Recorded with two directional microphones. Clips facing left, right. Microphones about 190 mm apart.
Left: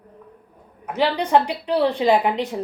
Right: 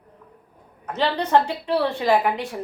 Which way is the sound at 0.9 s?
10° left (ahead or behind).